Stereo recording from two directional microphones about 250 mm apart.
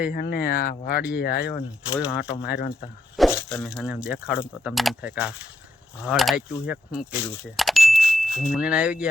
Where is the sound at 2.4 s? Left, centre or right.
Left.